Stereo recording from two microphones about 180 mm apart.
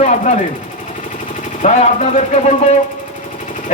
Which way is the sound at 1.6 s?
35° left (ahead or behind).